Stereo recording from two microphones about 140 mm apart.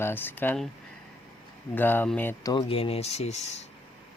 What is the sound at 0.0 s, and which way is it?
Speech, 15° left (ahead or behind).